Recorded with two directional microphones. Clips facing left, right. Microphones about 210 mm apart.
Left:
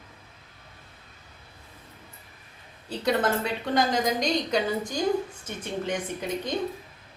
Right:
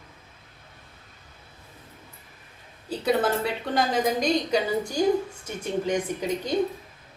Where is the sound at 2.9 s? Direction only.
5° right (ahead or behind).